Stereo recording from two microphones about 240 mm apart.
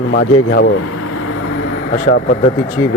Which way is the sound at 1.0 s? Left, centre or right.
Left.